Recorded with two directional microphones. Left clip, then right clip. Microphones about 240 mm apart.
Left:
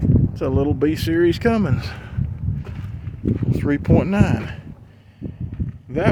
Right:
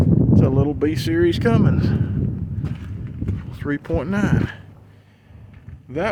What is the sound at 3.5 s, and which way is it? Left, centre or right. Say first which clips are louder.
Speech: left 4 dB; centre.